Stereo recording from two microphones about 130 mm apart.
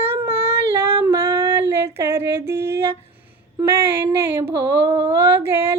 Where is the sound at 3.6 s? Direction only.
15° right (ahead or behind).